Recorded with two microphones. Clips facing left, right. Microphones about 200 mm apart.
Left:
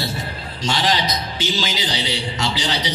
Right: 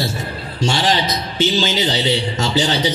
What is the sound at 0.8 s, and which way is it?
A man's voice, 30° right (ahead or behind).